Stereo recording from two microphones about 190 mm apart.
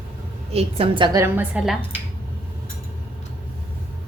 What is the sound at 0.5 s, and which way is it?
Speech, 30° right (ahead or behind).